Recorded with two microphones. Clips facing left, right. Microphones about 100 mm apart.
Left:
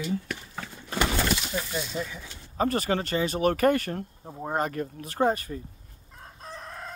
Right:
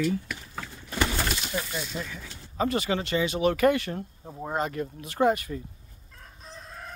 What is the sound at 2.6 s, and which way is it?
Speech, 45° left (ahead or behind).